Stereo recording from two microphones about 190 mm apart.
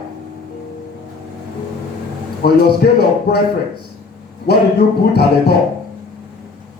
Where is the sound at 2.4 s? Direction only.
55° left (ahead or behind).